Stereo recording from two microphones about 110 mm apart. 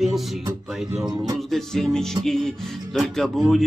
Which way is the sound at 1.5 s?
5° left (ahead or behind).